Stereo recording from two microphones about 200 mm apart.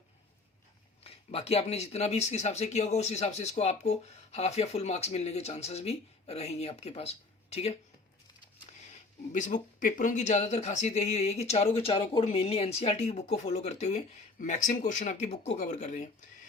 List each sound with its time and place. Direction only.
1.0 s speech: 30° left (ahead or behind)
9.3 s speech: 40° left (ahead or behind)